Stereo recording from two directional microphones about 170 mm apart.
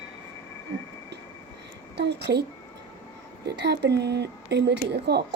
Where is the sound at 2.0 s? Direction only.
80° right.